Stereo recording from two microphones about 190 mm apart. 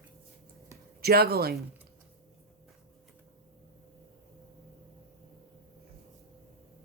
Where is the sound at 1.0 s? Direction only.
55° right (ahead or behind).